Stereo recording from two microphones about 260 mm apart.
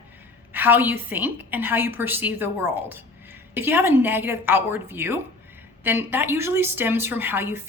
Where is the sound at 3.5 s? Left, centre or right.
Centre.